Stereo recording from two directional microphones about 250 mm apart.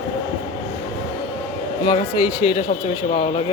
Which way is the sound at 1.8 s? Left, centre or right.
Centre.